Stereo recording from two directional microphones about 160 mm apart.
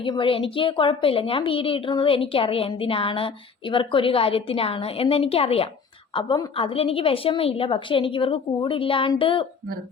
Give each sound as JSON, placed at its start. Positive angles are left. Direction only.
{"t": 0.0, "sound": "a woman's voice", "side_deg": 30}